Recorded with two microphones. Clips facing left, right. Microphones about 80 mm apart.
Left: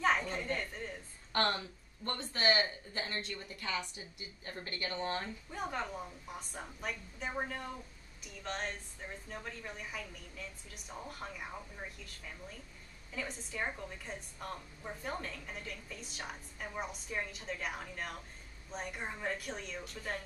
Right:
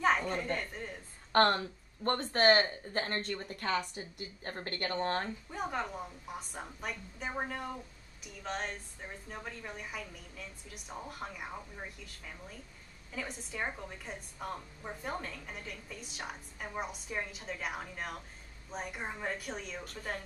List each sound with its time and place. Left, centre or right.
0.0 s a sound: centre
1.3 s speech: right
5.5 s a woman's voice: centre